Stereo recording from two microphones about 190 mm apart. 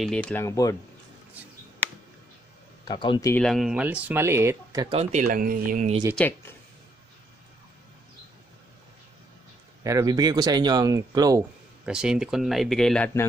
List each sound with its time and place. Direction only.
0.0 s speech: 5° left (ahead or behind)
2.8 s speech: 25° left (ahead or behind)
3.3 s speech: centre (ahead or behind); by 4.8 s 15° right (ahead or behind)
5.2 s speech: 50° right (ahead or behind)
6.1 s speech: 10° left (ahead or behind)
9.8 s speech: 20° right (ahead or behind)
11.8 s speech: 5° right (ahead or behind); by 13.3 s 10° left (ahead or behind)